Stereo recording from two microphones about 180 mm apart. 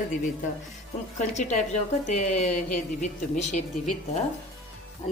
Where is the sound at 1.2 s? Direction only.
40° left (ahead or behind).